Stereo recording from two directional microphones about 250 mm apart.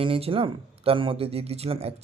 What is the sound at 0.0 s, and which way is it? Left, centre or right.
Speech, right.